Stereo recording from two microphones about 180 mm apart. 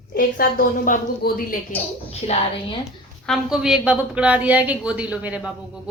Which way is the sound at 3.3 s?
5° right (ahead or behind).